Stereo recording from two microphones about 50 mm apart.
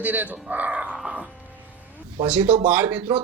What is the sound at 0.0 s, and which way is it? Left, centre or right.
Speech, right.